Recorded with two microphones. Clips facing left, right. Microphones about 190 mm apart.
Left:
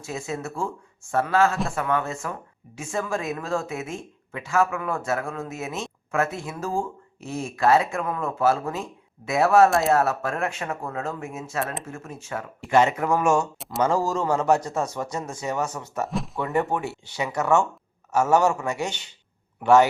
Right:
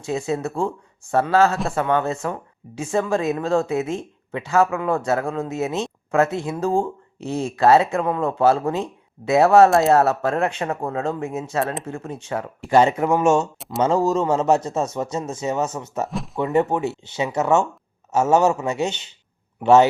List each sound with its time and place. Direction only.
0.3 s speech: 35° right (ahead or behind)
6.2 s speech: 20° right (ahead or behind)
6.6 s speech: 30° right (ahead or behind)
13.6 s speech: centre (ahead or behind)
13.8 s speech: 20° right (ahead or behind)
16.0 s speech: centre (ahead or behind)
16.4 s a man's voice: 20° right (ahead or behind)